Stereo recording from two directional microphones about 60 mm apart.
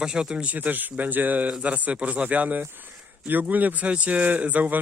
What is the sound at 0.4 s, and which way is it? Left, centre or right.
Speech, right.